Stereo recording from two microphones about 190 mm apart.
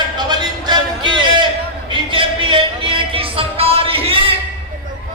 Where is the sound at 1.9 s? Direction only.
25° right (ahead or behind).